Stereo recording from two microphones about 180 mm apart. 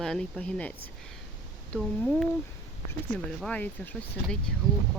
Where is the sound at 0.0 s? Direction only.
5° left (ahead or behind).